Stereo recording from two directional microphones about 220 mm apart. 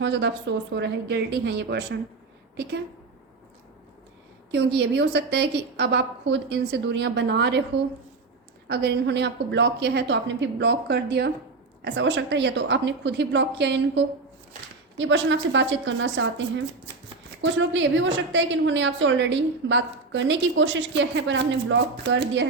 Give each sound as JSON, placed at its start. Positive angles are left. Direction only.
{"t": 0.0, "sound": "a woman's voice", "side_deg": -50}
{"t": 4.5, "sound": "a woman's voice", "side_deg": -50}
{"t": 8.6, "sound": "a woman's voice", "side_deg": -50}